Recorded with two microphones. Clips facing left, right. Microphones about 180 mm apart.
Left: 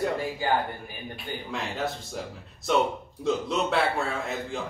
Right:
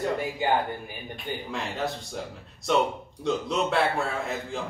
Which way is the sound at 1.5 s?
Centre (ahead or behind).